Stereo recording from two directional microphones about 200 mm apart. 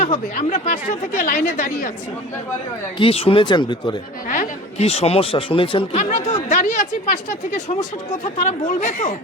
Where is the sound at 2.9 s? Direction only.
30° left (ahead or behind).